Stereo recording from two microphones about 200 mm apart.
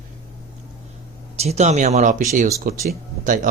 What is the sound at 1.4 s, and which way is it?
Speech, 35° right (ahead or behind).